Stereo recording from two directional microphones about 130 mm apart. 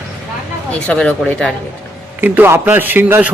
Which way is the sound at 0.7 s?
10° left (ahead or behind).